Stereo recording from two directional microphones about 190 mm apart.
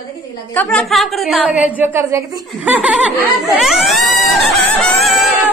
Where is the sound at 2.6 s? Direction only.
5° right (ahead or behind).